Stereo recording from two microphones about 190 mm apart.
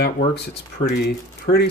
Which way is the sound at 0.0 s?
60° left (ahead or behind).